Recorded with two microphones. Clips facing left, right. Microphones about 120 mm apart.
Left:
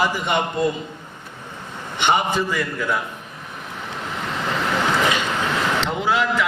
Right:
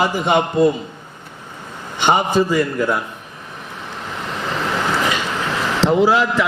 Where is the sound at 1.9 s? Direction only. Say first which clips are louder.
Right 4 dB; 35° right (ahead or behind).